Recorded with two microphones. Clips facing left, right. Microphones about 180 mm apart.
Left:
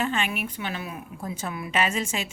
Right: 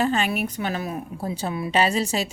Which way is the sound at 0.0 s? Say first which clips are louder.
Right 5 dB; 35° right (ahead or behind).